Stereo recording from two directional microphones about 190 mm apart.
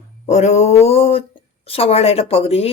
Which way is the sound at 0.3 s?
35° left (ahead or behind).